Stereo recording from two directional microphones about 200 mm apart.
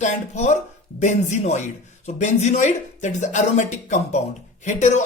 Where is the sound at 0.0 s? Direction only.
35° left (ahead or behind).